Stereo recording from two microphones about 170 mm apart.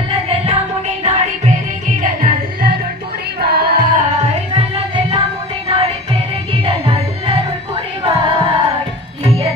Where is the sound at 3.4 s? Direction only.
65° right (ahead or behind).